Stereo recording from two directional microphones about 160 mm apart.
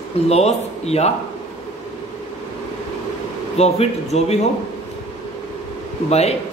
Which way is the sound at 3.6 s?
40° left (ahead or behind).